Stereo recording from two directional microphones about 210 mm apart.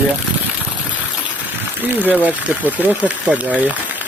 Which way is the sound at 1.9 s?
10° right (ahead or behind).